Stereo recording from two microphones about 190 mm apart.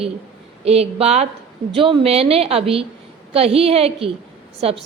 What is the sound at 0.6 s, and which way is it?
A woman's voice, 35° right (ahead or behind).